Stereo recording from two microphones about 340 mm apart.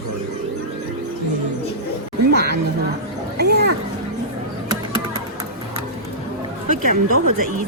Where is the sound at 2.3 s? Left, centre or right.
Right.